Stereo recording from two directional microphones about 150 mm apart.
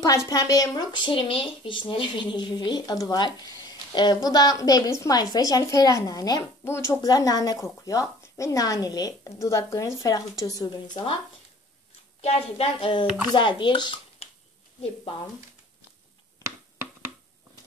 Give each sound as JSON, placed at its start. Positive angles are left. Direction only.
{"t": 0.0, "sound": "a woman's voice", "side_deg": 25}
{"t": 12.2, "sound": "speech", "side_deg": 40}